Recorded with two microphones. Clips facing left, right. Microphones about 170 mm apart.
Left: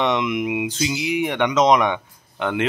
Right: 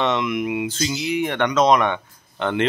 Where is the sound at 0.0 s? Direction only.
15° left (ahead or behind).